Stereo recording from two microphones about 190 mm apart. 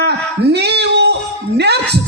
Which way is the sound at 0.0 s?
60° right (ahead or behind).